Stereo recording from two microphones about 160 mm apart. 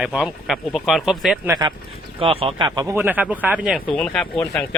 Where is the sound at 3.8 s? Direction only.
5° left (ahead or behind).